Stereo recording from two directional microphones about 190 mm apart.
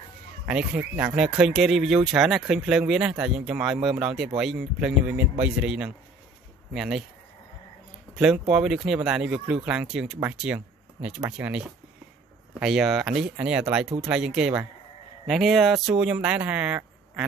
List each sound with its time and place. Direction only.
0.5 s speech: 5° right (ahead or behind)
8.2 s speech: 5° right (ahead or behind)